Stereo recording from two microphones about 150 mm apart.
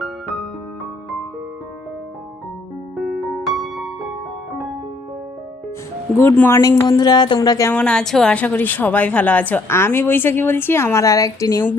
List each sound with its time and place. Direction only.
0.0 s music: 5° left (ahead or behind)
3.0 s music: centre (ahead or behind)
6.1 s a woman's voice: 15° left (ahead or behind)
7.7 s a woman's voice: 10° left (ahead or behind)